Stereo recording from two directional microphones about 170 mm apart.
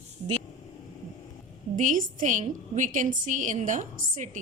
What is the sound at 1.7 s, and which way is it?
A woman's voice, 50° right (ahead or behind).